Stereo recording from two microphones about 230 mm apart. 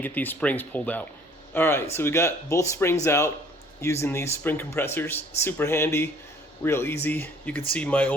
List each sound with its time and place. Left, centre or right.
0.0 s speech: centre